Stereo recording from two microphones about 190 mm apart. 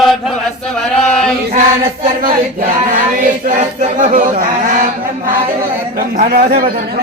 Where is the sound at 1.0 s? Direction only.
5° left (ahead or behind).